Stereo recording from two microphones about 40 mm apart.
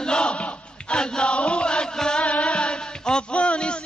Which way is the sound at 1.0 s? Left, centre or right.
Left.